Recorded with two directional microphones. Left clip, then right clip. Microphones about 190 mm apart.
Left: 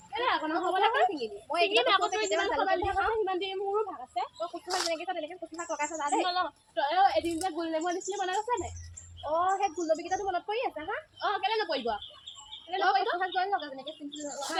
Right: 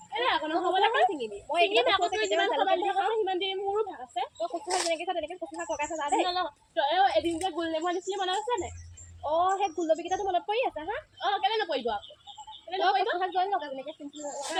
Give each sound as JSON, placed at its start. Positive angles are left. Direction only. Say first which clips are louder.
{"t": 0.1, "sound": "a woman's voice", "louder": "right 2 dB", "side_deg": 0}
{"t": 4.4, "sound": "a woman's voice", "louder": "right 3 dB", "side_deg": -15}
{"t": 9.3, "sound": "speech", "louder": "right 2 dB", "side_deg": -10}
{"t": 11.2, "sound": "a woman's voice", "louder": "right 2 dB", "side_deg": 0}
{"t": 13.1, "sound": "speech", "louder": "right 2 dB", "side_deg": -10}